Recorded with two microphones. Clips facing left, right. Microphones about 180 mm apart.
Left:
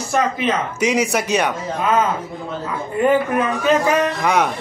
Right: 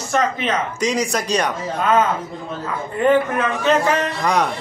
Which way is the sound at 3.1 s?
10° left (ahead or behind).